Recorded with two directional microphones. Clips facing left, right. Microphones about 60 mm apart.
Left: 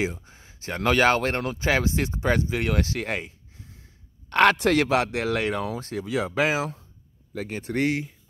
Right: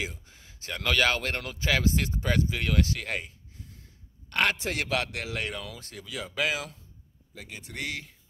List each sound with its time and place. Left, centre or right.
0.0 s speech: left
4.3 s speech: left
4.7 s speech: left
7.3 s speech: left